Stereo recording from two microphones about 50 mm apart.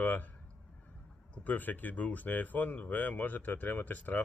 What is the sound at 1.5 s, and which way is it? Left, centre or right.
Speech, left.